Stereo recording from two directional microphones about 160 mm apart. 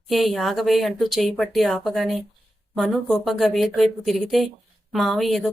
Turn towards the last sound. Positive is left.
turn(degrees=0)  # may be behind; listen again after turning